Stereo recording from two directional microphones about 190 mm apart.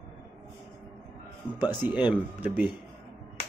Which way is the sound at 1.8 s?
10° right (ahead or behind).